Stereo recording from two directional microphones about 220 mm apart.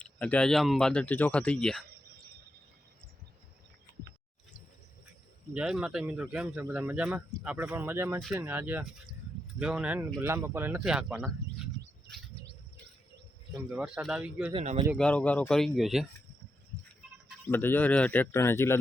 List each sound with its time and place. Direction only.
0.0 s speech: 5° left (ahead or behind)
5.5 s speech: 5° right (ahead or behind)
13.7 s speech: 5° right (ahead or behind)
14.5 s speech: 30° right (ahead or behind)
14.9 s speech: 5° left (ahead or behind)
17.5 s speech: 10° left (ahead or behind)